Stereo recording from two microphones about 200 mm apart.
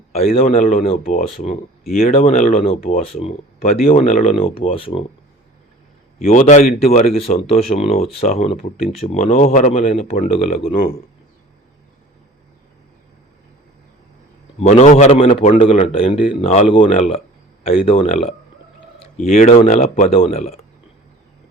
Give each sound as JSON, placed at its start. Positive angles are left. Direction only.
{"t": 0.1, "sound": "speech", "side_deg": 30}
{"t": 1.9, "sound": "speech", "side_deg": 45}
{"t": 2.1, "sound": "speech", "side_deg": 35}
{"t": 6.1, "sound": "speech", "side_deg": 35}
{"t": 14.6, "sound": "speech", "side_deg": 35}